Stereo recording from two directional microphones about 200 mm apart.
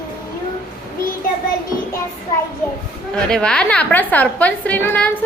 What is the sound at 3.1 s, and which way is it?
A woman's voice, 5° left (ahead or behind).